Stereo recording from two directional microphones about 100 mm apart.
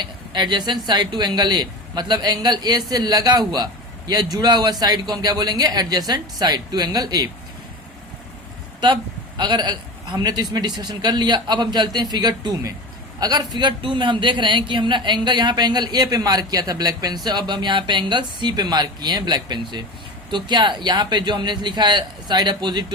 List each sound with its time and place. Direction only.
0.0 s speech: 50° right (ahead or behind)
9.4 s speech: 50° right (ahead or behind)